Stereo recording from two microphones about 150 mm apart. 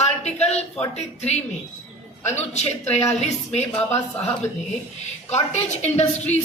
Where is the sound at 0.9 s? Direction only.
45° left (ahead or behind).